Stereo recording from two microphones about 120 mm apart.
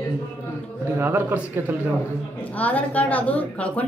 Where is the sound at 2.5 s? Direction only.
15° left (ahead or behind).